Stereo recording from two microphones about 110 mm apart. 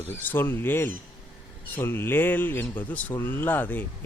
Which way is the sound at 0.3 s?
20° left (ahead or behind).